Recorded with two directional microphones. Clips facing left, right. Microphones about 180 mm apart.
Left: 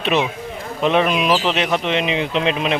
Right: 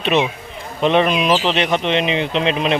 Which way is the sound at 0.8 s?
5° left (ahead or behind).